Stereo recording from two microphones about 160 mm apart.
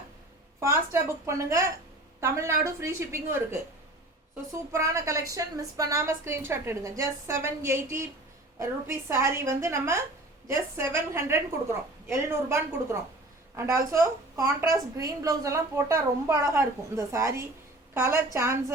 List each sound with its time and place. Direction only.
0.6 s a woman's voice: 15° right (ahead or behind)
4.7 s a woman's voice: 20° right (ahead or behind)